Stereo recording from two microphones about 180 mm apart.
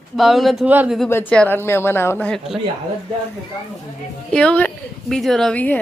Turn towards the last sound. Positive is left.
turn(degrees=10)  # may be behind; listen again after turning